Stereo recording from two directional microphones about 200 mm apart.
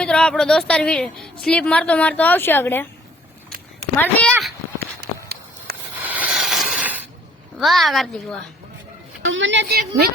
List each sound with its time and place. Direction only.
0.0 s a woman's voice: 5° left (ahead or behind)
3.9 s a sound: 10° left (ahead or behind)
4.9 s a sound: 55° right (ahead or behind)
6.0 s rub: 10° right (ahead or behind)
7.6 s a woman's voice: centre (ahead or behind)
9.2 s a woman's voice: 70° right (ahead or behind); by 10.1 s 50° right (ahead or behind)